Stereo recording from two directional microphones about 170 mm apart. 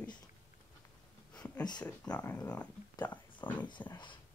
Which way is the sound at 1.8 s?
10° left (ahead or behind).